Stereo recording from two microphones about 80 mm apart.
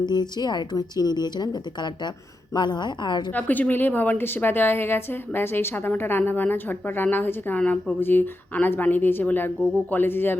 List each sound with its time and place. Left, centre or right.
0.0 s a woman's voice: left
3.3 s a woman's voice: centre